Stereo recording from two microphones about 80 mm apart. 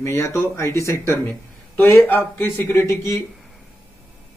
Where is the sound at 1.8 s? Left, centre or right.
Left.